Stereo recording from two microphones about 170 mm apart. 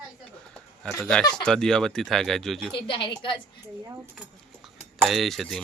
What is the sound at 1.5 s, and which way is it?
Speech, 5° left (ahead or behind).